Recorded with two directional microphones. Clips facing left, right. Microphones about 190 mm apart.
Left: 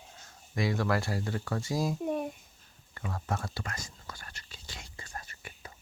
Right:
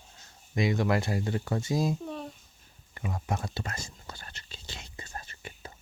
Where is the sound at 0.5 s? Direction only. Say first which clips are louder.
Right 3 dB; 20° right (ahead or behind).